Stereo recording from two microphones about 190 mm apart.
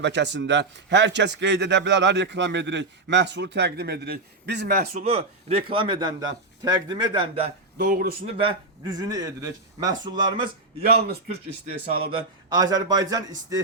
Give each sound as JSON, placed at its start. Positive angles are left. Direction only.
{"t": 0.0, "sound": "speech", "side_deg": -65}
{"t": 5.0, "sound": "speech", "side_deg": -30}
{"t": 7.8, "sound": "a man's voice", "side_deg": -55}
{"t": 8.2, "sound": "speech", "side_deg": -30}
{"t": 10.8, "sound": "a man's voice", "side_deg": -55}
{"t": 12.1, "sound": "speech", "side_deg": -20}